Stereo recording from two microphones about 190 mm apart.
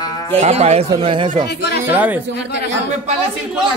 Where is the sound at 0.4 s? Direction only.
35° right (ahead or behind).